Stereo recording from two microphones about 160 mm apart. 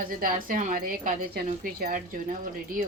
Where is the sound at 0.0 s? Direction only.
60° right (ahead or behind).